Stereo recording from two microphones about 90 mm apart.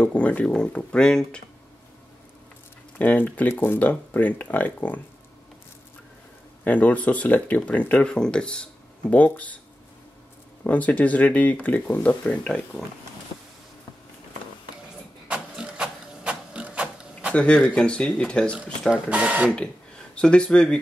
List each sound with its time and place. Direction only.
0.0 s speech: 15° left (ahead or behind)
3.0 s speech: 20° left (ahead or behind)
6.6 s speech: 20° left (ahead or behind)
10.6 s speech: 15° left (ahead or behind)
15.2 s printer: 10° right (ahead or behind)
17.3 s speech: 10° left (ahead or behind)
18.9 s speech: 15° right (ahead or behind)
20.2 s speech: 10° left (ahead or behind)